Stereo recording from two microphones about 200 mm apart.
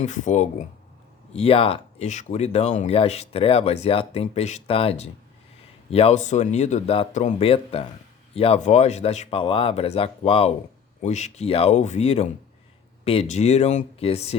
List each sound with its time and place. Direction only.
0.0 s speech: 35° left (ahead or behind)